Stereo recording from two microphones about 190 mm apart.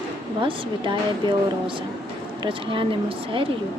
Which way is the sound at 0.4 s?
25° right (ahead or behind).